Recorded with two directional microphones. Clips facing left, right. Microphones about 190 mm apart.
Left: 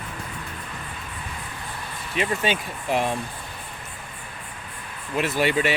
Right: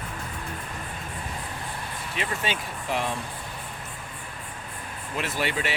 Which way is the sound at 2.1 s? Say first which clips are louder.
Left 6 dB; 15° left (ahead or behind).